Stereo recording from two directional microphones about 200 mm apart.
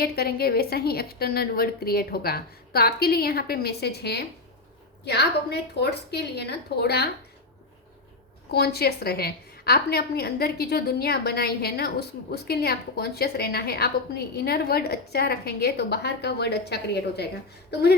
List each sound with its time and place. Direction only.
0.0 s a woman's voice: 50° left (ahead or behind)
8.4 s a woman's voice: 55° left (ahead or behind)